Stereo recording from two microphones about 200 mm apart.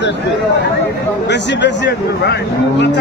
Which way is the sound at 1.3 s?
60° left (ahead or behind).